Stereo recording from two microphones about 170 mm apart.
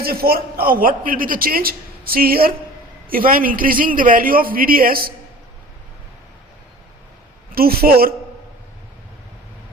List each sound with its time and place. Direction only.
0.0 s a man's voice: 60° right (ahead or behind)
7.5 s a man's voice: 60° right (ahead or behind)